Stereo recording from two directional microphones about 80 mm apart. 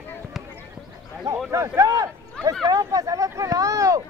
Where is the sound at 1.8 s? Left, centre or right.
Right.